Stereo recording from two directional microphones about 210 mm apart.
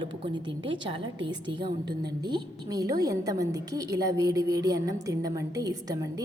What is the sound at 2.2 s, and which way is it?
A woman's voice, 20° right (ahead or behind).